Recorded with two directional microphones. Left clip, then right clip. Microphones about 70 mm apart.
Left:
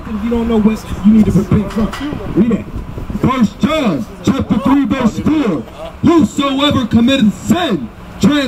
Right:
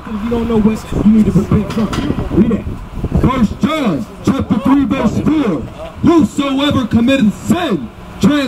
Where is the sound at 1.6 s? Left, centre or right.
Right.